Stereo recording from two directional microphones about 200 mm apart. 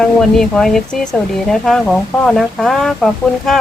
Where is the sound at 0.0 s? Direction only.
5° left (ahead or behind).